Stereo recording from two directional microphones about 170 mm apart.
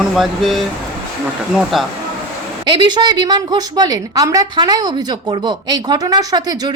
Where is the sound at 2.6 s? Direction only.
25° right (ahead or behind).